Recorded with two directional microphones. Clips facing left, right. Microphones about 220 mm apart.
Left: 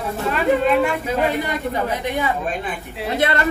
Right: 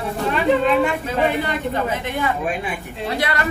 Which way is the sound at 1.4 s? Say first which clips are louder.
Even; 10° left (ahead or behind).